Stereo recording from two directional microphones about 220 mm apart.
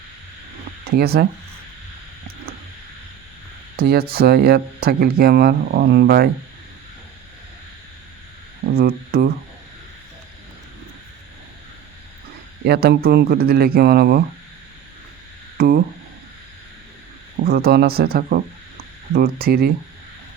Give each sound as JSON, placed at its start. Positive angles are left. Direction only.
{"t": 0.9, "sound": "speech", "side_deg": -45}
{"t": 3.8, "sound": "speech", "side_deg": -45}
{"t": 8.7, "sound": "speech", "side_deg": -45}
{"t": 12.6, "sound": "speech", "side_deg": -45}
{"t": 15.5, "sound": "speech", "side_deg": -45}
{"t": 17.4, "sound": "speech", "side_deg": -45}